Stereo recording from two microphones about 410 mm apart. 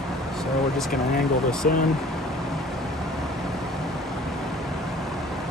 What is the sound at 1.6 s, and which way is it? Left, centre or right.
Speech, left.